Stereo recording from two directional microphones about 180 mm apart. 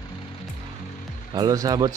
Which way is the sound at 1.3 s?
20° right (ahead or behind).